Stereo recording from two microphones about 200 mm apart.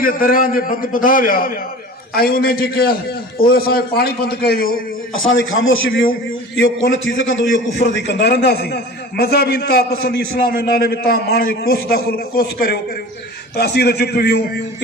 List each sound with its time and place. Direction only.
0.0 s a man's voice: 45° left (ahead or behind)
5.1 s a man's voice: 75° left (ahead or behind)
8.0 s a man's voice: 55° left (ahead or behind)